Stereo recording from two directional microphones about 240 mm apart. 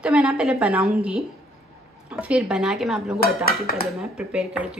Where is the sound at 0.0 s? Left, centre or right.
Centre.